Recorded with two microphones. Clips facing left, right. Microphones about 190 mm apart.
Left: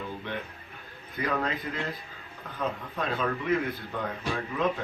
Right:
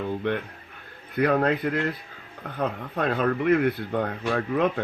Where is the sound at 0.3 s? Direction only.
65° right (ahead or behind).